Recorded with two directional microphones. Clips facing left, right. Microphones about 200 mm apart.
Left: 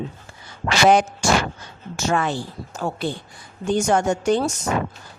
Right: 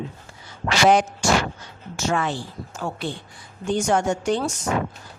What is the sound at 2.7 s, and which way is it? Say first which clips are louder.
A woman's voice: left 4 dB; 40° left (ahead or behind).